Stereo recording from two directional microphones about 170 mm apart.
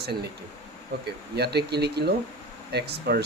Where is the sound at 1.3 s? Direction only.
75° right (ahead or behind).